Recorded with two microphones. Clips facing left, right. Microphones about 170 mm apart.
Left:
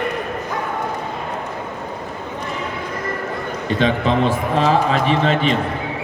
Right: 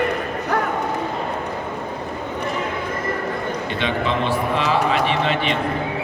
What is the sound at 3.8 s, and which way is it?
A man's voice, 40° left (ahead or behind).